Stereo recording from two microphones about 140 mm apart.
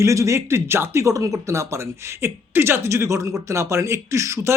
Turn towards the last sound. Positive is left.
turn(degrees=-20)  # may be behind; listen again after turning